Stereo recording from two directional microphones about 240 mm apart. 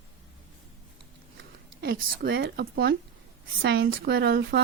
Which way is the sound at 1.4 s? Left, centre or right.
Right.